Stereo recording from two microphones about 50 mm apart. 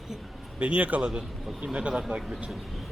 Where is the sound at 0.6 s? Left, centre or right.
Right.